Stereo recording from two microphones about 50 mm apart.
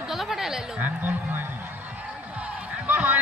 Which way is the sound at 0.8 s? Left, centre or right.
Right.